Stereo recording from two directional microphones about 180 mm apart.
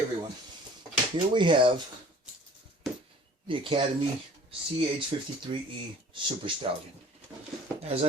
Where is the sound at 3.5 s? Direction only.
30° right (ahead or behind).